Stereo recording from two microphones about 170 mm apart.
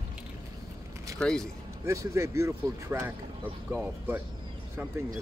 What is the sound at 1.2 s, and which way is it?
Speech, 5° left (ahead or behind).